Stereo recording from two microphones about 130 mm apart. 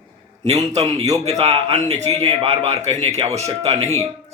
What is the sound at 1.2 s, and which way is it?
A man's voice, 55° right (ahead or behind).